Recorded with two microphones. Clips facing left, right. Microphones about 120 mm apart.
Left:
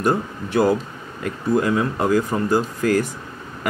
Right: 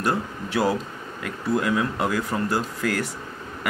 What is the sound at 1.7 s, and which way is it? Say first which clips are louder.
Speech: left 4 dB; 30° left (ahead or behind).